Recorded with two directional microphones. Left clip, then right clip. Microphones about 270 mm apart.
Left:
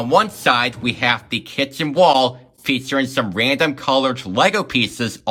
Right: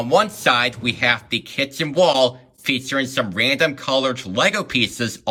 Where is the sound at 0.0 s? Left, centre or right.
Centre.